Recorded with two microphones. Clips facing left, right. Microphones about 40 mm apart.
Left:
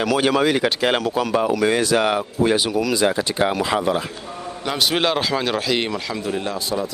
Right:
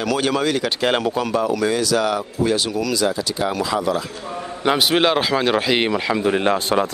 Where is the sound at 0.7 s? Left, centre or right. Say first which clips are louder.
Even; centre.